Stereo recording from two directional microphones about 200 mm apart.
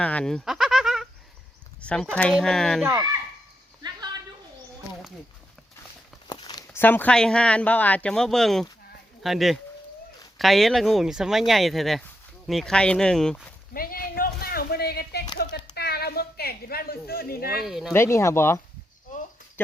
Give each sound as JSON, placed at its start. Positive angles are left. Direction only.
{"t": 0.0, "sound": "goat", "side_deg": 5}
{"t": 1.8, "sound": "speech", "side_deg": 5}
{"t": 2.8, "sound": "a child's voice", "side_deg": -15}
{"t": 6.2, "sound": "speech", "side_deg": 20}
{"t": 13.7, "sound": "a sound", "side_deg": 45}
{"t": 15.7, "sound": "a woman's voice", "side_deg": 50}
{"t": 17.7, "sound": "speech", "side_deg": 0}
{"t": 17.9, "sound": "speech", "side_deg": 15}
{"t": 19.1, "sound": "a sound", "side_deg": 40}
{"t": 19.6, "sound": "speech", "side_deg": 10}